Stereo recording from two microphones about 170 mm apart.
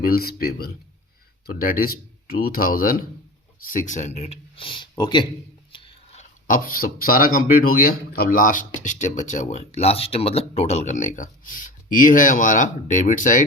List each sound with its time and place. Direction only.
0.0 s speech: 60° left (ahead or behind); by 5.2 s 25° left (ahead or behind)
5.7 s a sound: 30° left (ahead or behind)
6.5 s a man's voice: 55° left (ahead or behind)